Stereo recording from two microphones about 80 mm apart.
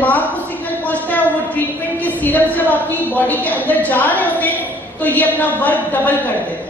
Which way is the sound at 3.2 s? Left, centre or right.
Left.